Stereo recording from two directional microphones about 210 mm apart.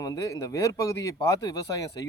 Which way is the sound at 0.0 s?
15° left (ahead or behind).